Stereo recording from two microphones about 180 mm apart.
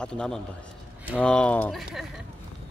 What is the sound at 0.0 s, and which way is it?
Speech, 5° left (ahead or behind).